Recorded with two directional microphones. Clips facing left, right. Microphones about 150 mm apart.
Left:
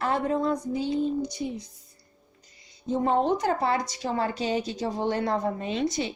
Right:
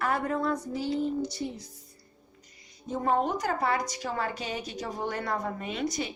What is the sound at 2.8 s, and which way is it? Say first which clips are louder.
Speech: left 3 dB; 25° left (ahead or behind).